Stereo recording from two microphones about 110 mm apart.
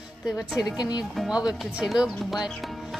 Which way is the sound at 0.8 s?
40° left (ahead or behind).